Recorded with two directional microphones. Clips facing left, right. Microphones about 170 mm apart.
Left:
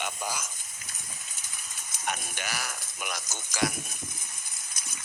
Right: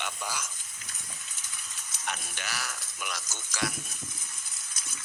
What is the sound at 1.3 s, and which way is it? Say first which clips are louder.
Speech: left 1 dB; 10° left (ahead or behind).